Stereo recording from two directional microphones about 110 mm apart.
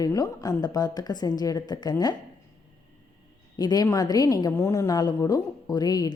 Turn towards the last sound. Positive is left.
turn(degrees=35)  # may be behind; listen again after turning